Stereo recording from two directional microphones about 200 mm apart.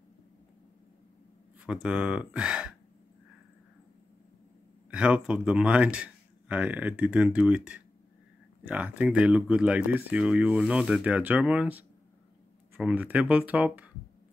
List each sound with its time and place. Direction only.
1.7 s speech: 5° right (ahead or behind)
4.9 s speech: 5° right (ahead or behind)